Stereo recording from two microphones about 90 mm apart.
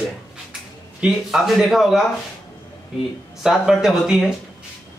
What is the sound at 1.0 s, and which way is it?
Speech, 5° right (ahead or behind).